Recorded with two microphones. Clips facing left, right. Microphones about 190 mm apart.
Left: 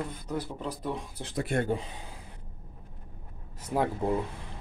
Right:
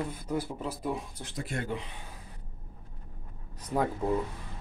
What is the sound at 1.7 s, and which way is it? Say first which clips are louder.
Speech: left 5 dB; 35° left (ahead or behind).